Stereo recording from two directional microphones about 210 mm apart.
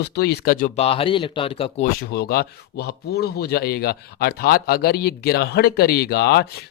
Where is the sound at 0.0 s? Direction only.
50° left (ahead or behind); by 1.9 s 25° left (ahead or behind).